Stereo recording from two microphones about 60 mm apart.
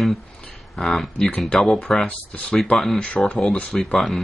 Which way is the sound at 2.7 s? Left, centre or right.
Centre.